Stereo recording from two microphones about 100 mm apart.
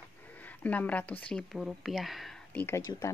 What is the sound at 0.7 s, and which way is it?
Speech, 15° left (ahead or behind).